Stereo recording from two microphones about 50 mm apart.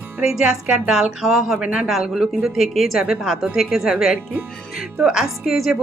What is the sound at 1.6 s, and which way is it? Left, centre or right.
Speech, right.